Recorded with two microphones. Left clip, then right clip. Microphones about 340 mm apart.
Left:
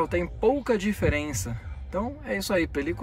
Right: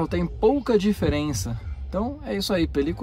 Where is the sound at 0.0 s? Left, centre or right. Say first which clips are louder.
Right 2 dB; centre.